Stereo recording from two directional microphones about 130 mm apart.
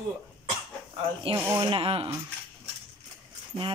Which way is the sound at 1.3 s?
45° right (ahead or behind).